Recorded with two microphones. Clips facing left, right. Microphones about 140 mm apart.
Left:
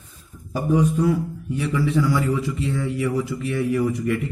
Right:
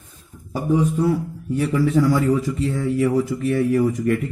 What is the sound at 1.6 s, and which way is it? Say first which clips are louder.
A man's voice: right 3 dB; 45° right (ahead or behind).